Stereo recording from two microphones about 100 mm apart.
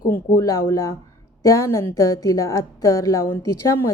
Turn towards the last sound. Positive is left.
turn(degrees=25)  # may be behind; listen again after turning